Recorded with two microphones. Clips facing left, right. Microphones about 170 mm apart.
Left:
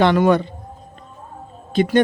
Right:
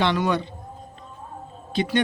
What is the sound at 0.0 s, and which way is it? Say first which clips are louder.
Speech: left 8 dB; 50° left (ahead or behind).